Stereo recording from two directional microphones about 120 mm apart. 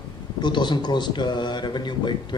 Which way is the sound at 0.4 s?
40° left (ahead or behind).